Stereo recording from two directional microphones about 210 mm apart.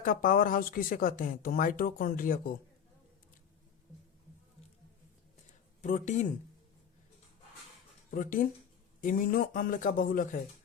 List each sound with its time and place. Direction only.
0.0 s speech: 40° left (ahead or behind)
5.8 s speech: 35° left (ahead or behind)
8.1 s speech: 40° left (ahead or behind)